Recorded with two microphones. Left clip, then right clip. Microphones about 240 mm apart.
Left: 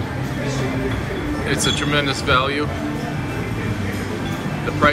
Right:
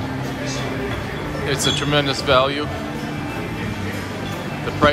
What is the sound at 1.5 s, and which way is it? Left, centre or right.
Speech, centre.